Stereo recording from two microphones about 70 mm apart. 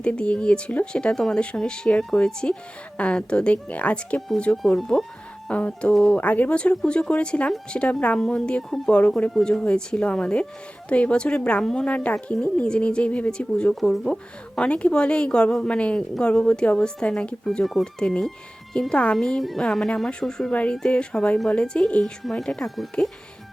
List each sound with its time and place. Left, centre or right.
0.0 s a woman's voice: centre
4.8 s speech: centre
5.5 s a woman's voice: centre
6.1 s a woman's voice: left
13.7 s a woman's voice: centre
22.2 s a woman's voice: centre